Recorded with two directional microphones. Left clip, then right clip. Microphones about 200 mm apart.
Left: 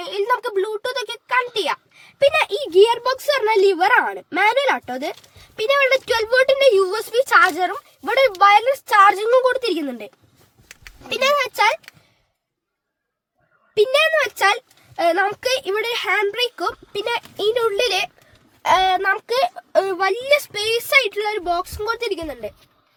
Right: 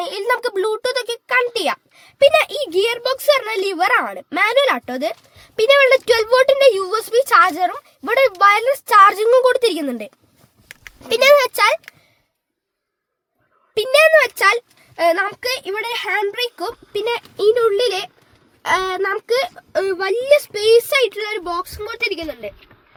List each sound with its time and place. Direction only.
0.0 s a sound: 50° right (ahead or behind)
2.3 s speech: 45° right (ahead or behind)
13.7 s speech: 35° right (ahead or behind)
14.9 s a woman's voice: 15° right (ahead or behind); by 17.1 s 5° left (ahead or behind)
17.1 s speech: 15° left (ahead or behind)
18.6 s speech: 10° left (ahead or behind)